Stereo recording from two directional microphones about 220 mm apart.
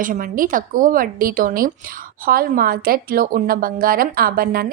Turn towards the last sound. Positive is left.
turn(degrees=-40)  # may be behind; listen again after turning